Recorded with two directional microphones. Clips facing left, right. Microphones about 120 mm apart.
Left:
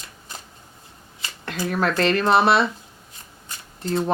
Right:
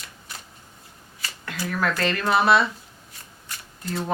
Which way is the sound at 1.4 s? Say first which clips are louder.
Left 3 dB; 30° left (ahead or behind).